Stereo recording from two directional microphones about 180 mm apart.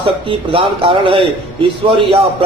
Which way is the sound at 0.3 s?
30° right (ahead or behind).